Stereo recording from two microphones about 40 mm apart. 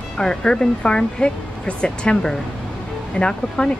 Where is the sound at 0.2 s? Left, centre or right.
Centre.